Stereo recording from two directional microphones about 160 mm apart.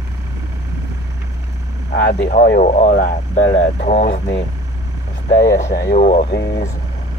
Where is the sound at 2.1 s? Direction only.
65° left (ahead or behind).